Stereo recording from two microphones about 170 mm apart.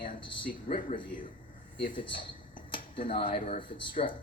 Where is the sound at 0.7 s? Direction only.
50° left (ahead or behind).